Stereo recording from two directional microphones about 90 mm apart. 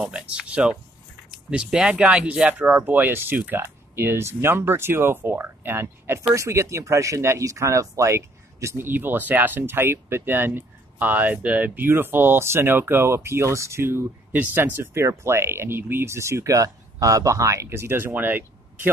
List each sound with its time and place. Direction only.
0.0 s speech: 10° right (ahead or behind)